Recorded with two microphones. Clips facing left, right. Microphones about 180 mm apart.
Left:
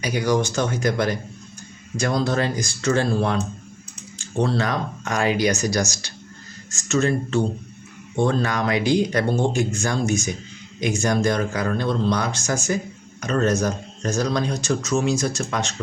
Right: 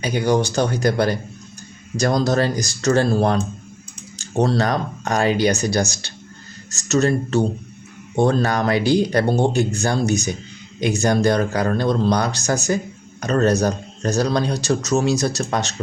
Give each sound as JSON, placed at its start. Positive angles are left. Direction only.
{"t": 0.0, "sound": "speech", "side_deg": -30}